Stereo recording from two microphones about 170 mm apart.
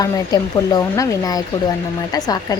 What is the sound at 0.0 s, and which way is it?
A woman's voice, 25° left (ahead or behind).